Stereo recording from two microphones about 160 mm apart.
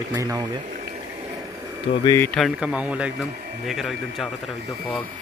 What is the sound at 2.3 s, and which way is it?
Speech, 5° right (ahead or behind).